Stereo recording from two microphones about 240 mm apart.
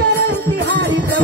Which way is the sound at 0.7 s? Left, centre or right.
Right.